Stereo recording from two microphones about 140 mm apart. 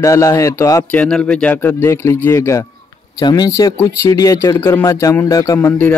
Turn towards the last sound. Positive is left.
turn(degrees=15)  # may be behind; listen again after turning